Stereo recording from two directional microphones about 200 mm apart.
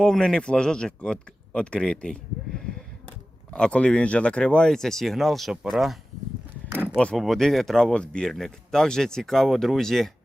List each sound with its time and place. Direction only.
0.0 s speech: 5° left (ahead or behind)
3.5 s speech: 5° left (ahead or behind)